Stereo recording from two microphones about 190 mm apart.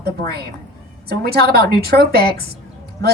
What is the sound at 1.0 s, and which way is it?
A woman's voice, 55° right (ahead or behind).